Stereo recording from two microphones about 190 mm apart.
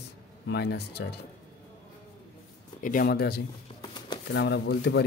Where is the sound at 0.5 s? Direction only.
60° left (ahead or behind).